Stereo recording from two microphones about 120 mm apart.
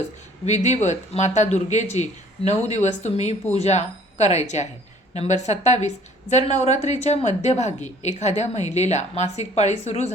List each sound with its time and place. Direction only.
0.4 s speech: 70° left (ahead or behind)